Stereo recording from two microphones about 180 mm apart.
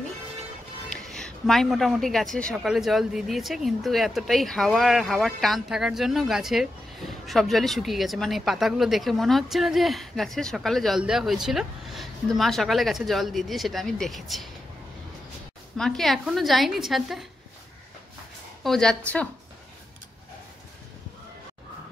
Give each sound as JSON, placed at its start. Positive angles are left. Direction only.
{"t": 1.0, "sound": "a woman's voice", "side_deg": 0}
{"t": 15.8, "sound": "a woman's voice", "side_deg": 0}
{"t": 18.6, "sound": "a woman's voice", "side_deg": 0}